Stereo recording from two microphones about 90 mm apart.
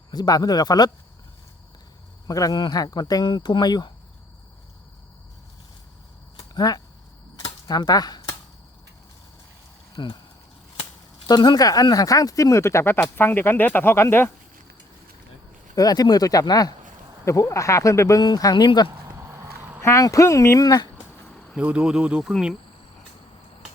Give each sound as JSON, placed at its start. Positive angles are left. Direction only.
{"t": 0.1, "sound": "speech", "side_deg": 45}
{"t": 2.2, "sound": "speech", "side_deg": 45}
{"t": 3.2, "sound": "speech", "side_deg": 60}
{"t": 6.5, "sound": "speech", "side_deg": 45}
{"t": 7.3, "sound": "a sound", "side_deg": 50}
{"t": 10.0, "sound": "speech", "side_deg": 60}
{"t": 11.3, "sound": "speech", "side_deg": 50}
{"t": 15.7, "sound": "speech", "side_deg": 45}
{"t": 17.2, "sound": "speech", "side_deg": 35}
{"t": 18.2, "sound": "speech", "side_deg": 45}
{"t": 19.0, "sound": "a sound", "side_deg": -35}
{"t": 19.8, "sound": "speech", "side_deg": 35}
{"t": 21.6, "sound": "insect", "side_deg": -15}
{"t": 22.2, "sound": "speech", "side_deg": -5}